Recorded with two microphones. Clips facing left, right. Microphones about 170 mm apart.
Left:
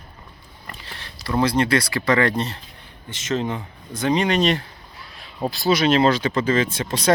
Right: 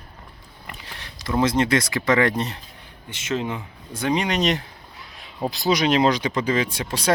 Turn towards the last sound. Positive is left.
turn(degrees=-10)  # may be behind; listen again after turning